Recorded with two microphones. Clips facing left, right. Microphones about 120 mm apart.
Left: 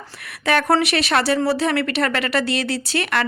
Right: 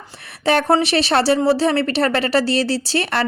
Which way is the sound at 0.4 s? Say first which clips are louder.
Right 2 dB; 30° right (ahead or behind).